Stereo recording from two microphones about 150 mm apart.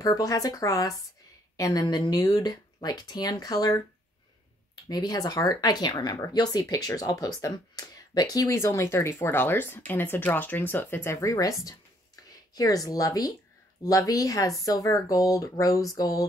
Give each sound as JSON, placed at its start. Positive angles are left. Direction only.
{"t": 0.0, "sound": "speech", "side_deg": 25}
{"t": 4.8, "sound": "speech", "side_deg": 25}